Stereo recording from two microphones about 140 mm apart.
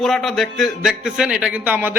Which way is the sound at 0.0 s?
Centre (ahead or behind).